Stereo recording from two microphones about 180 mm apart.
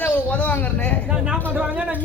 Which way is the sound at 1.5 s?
10° right (ahead or behind).